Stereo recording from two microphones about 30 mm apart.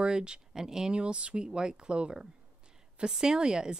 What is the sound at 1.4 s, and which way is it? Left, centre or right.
Speech, right.